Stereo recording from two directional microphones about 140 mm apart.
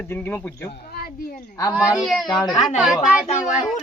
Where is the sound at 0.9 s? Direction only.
90° left.